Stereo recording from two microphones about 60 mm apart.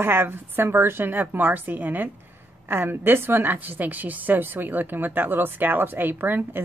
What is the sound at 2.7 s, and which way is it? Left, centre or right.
A woman's voice, right.